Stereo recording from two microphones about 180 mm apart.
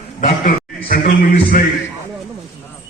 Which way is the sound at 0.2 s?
45° left (ahead or behind).